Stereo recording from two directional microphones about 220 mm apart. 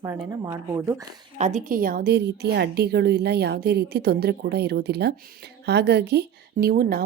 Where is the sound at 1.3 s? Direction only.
35° right (ahead or behind).